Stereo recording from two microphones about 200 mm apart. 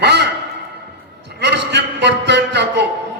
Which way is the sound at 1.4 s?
60° right (ahead or behind).